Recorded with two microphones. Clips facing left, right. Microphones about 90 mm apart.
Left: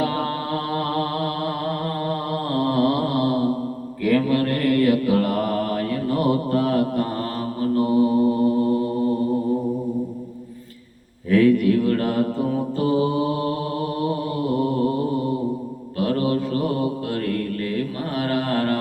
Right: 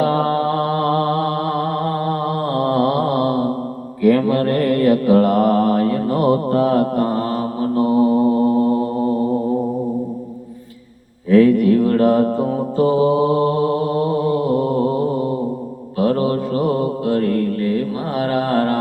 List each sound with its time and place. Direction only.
0.0 s mantra: 40° right (ahead or behind)
11.3 s mantra: 40° right (ahead or behind)
16.0 s mantra: 40° right (ahead or behind)
18.2 s mantra: 40° right (ahead or behind)